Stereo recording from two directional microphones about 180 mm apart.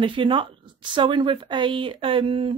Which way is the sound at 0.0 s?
30° right (ahead or behind).